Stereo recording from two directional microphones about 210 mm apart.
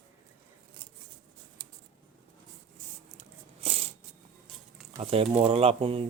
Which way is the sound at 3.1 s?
25° right (ahead or behind).